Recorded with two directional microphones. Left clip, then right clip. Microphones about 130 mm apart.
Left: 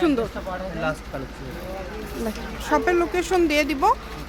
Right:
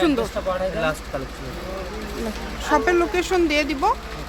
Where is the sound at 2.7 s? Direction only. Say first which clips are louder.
Right 2 dB; centre (ahead or behind).